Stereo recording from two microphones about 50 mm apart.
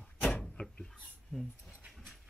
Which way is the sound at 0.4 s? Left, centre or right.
Centre.